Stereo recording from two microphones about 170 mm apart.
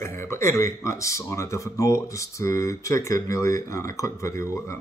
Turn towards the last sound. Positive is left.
turn(degrees=15)  # may be behind; listen again after turning